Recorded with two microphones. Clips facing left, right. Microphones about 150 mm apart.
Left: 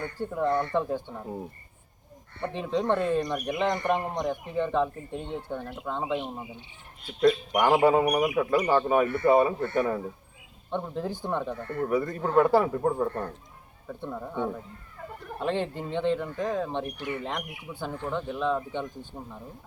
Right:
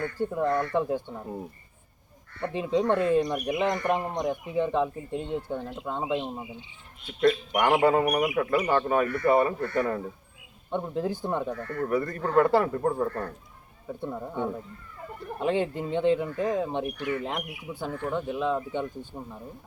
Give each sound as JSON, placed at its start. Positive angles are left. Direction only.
{"t": 0.2, "sound": "speech", "side_deg": -10}
{"t": 0.4, "sound": "speech", "side_deg": 20}
{"t": 0.7, "sound": "speech", "side_deg": -10}
{"t": 2.5, "sound": "speech", "side_deg": -10}
{"t": 7.2, "sound": "speech", "side_deg": 0}
{"t": 8.0, "sound": "speech", "side_deg": 0}
{"t": 8.6, "sound": "speech", "side_deg": 10}
{"t": 10.7, "sound": "speech", "side_deg": -10}
{"t": 11.5, "sound": "speech", "side_deg": 20}
{"t": 13.1, "sound": "speech", "side_deg": 15}
{"t": 13.8, "sound": "speech", "side_deg": -10}